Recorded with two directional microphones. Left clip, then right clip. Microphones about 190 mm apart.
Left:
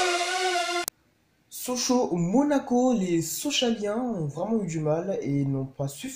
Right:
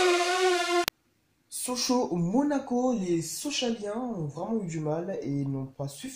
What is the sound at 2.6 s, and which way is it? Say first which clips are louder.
Speech: left 4 dB; 20° left (ahead or behind).